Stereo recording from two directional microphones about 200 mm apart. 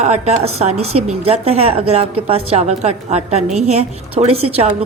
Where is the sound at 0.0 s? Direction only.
35° right (ahead or behind).